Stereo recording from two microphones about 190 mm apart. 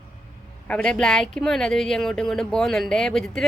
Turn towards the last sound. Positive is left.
turn(degrees=0)  # may be behind; listen again after turning